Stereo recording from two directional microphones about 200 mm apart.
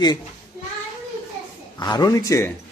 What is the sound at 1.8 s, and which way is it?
Speech, 20° left (ahead or behind).